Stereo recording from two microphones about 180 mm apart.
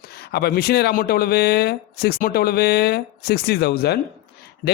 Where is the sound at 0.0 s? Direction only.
60° left (ahead or behind).